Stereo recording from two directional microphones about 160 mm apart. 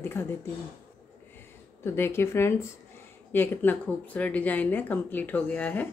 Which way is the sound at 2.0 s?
15° left (ahead or behind).